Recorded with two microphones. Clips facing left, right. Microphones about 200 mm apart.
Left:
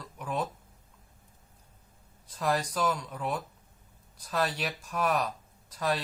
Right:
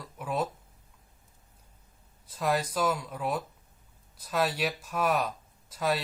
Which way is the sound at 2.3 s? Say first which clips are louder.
Right 1 dB; 5° right (ahead or behind).